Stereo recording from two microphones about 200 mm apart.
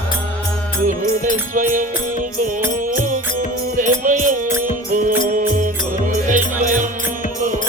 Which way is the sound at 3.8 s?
40° right (ahead or behind).